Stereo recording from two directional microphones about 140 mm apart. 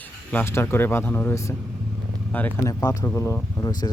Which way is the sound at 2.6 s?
25° left (ahead or behind).